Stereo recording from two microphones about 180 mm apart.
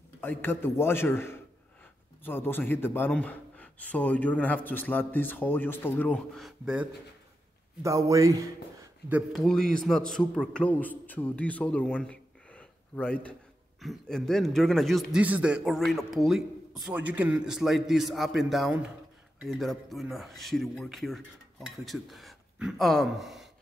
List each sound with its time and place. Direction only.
0.2 s a man's voice: 10° left (ahead or behind); by 6.9 s 5° right (ahead or behind)
7.8 s speech: 20° right (ahead or behind)
9.1 s a man's voice: centre (ahead or behind)